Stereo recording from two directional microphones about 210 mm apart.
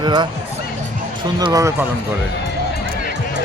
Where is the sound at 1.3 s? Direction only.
15° right (ahead or behind).